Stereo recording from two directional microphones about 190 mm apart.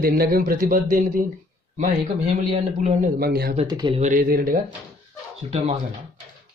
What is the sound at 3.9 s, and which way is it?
Speech, 40° right (ahead or behind).